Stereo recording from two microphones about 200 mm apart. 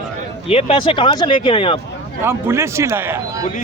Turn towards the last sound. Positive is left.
turn(degrees=-10)  # may be behind; listen again after turning